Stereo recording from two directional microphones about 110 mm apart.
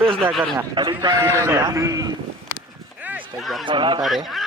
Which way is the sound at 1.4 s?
30° right (ahead or behind).